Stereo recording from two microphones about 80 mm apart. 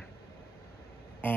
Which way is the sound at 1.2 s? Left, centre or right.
Left.